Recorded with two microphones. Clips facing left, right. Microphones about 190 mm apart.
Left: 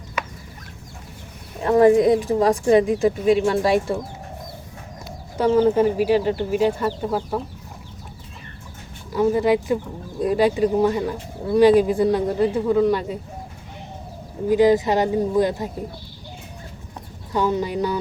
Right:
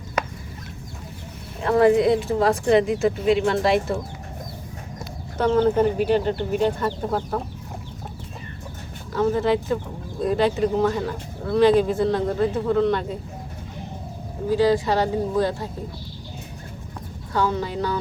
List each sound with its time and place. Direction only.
1.6 s speech: 15° left (ahead or behind)
5.4 s speech: 10° left (ahead or behind)
9.1 s speech: 15° left (ahead or behind)
14.5 s speech: 15° left (ahead or behind)
17.3 s speech: 20° left (ahead or behind)